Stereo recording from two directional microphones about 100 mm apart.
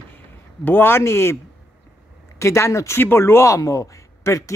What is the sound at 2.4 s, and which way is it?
Speech, 30° left (ahead or behind).